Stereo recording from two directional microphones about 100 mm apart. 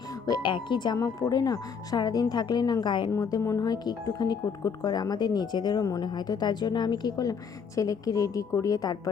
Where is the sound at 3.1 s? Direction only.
35° left (ahead or behind).